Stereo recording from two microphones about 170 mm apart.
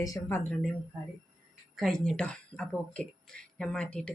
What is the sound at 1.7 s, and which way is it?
Speech, centre (ahead or behind).